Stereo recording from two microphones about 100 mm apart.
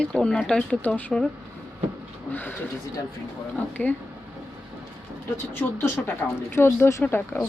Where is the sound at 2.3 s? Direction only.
20° left (ahead or behind).